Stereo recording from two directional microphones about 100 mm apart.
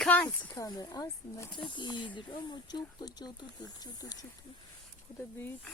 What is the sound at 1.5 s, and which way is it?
Speech, 50° left (ahead or behind).